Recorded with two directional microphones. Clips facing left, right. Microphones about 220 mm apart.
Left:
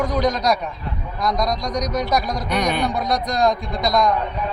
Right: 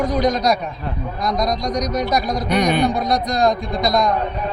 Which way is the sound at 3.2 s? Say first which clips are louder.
Right 2 dB; 50° right (ahead or behind).